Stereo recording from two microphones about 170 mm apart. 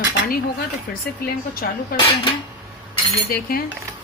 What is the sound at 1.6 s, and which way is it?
Speech, 65° left (ahead or behind).